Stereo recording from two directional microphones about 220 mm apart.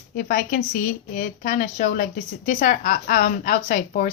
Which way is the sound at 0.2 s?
40° left (ahead or behind).